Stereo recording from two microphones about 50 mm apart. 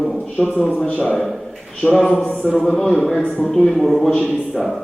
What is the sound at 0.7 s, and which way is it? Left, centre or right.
Speech, left.